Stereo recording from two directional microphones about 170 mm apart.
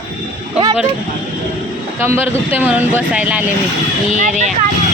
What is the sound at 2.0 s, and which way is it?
Speech, 10° right (ahead or behind).